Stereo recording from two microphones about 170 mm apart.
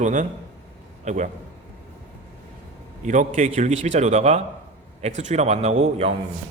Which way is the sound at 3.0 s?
45° right (ahead or behind).